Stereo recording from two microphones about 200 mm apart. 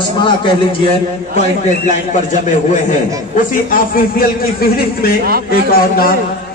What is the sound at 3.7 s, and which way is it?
A man's voice, 45° left (ahead or behind).